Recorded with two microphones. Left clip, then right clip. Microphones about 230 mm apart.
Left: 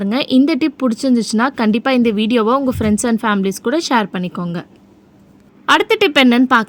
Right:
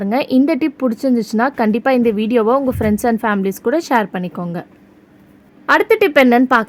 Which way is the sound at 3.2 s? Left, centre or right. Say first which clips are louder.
Left 1 dB; left.